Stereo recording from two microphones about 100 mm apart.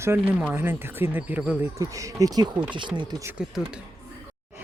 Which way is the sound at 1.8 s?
35° right (ahead or behind).